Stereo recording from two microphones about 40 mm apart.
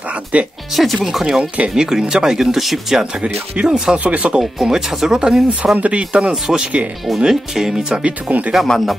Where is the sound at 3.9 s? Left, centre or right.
Right.